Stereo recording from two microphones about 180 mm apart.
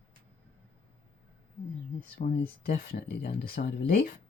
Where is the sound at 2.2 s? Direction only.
55° left (ahead or behind).